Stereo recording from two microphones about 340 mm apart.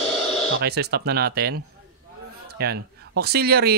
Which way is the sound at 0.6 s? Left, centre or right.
Right.